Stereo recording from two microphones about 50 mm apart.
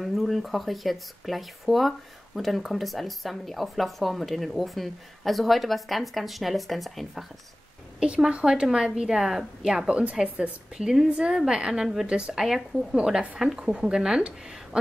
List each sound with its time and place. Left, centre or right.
0.0 s speech: centre
8.0 s a woman's voice: centre
12.4 s a woman's voice: centre